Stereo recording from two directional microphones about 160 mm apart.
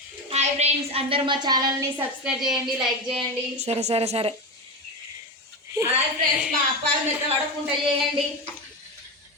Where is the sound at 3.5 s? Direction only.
40° right (ahead or behind).